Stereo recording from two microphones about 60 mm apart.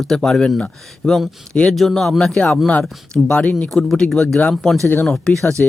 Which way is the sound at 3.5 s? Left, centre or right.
Centre.